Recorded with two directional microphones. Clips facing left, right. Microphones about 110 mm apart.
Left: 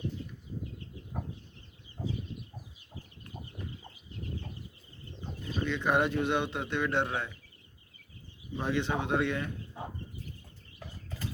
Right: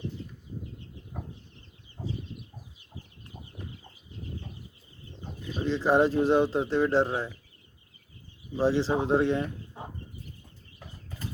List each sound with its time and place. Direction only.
5.6 s speech: 30° right (ahead or behind)
8.5 s speech: 30° right (ahead or behind)